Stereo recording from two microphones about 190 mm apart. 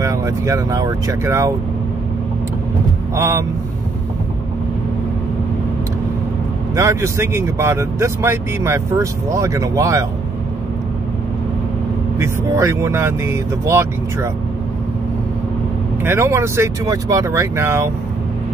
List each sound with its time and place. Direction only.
0.0 s speech: 15° right (ahead or behind)
3.2 s speech: 15° right (ahead or behind)
6.7 s speech: 15° right (ahead or behind)
12.2 s speech: 15° right (ahead or behind)
16.0 s speech: 15° right (ahead or behind)